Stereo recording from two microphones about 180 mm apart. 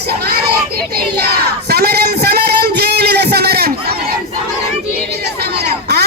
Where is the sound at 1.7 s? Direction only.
60° right (ahead or behind).